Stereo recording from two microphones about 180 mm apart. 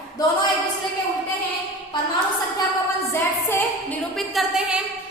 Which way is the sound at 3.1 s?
15° left (ahead or behind).